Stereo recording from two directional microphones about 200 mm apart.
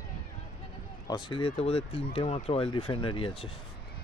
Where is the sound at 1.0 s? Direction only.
25° left (ahead or behind).